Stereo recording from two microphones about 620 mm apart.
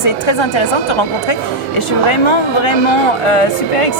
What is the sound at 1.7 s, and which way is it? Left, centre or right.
Speech, left.